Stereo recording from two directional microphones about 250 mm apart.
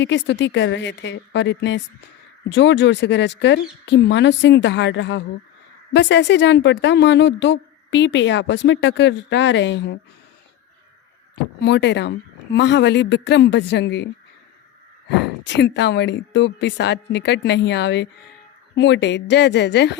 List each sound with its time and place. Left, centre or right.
0.0 s speech: left
11.6 s speech: left
15.4 s speech: left